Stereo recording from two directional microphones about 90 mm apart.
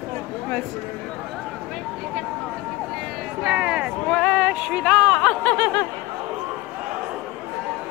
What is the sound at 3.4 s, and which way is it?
Speech, 10° right (ahead or behind).